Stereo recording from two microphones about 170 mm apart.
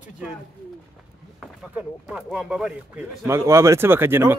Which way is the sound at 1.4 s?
5° right (ahead or behind).